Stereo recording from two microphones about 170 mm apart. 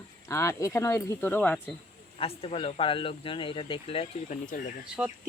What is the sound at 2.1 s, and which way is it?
Speech, 35° left (ahead or behind).